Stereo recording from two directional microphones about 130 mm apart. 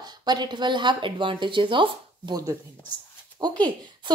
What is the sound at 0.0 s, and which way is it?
Speech, 35° right (ahead or behind).